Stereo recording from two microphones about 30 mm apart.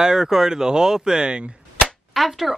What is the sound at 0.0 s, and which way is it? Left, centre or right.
Speech, centre.